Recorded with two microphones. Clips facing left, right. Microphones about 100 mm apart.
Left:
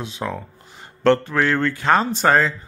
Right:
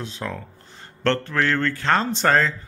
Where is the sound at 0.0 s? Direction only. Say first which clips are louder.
Left 3 dB; 15° left (ahead or behind).